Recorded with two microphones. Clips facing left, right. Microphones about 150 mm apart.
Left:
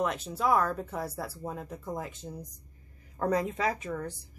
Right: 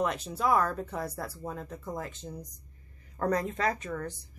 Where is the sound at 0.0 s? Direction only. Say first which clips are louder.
Even; centre (ahead or behind).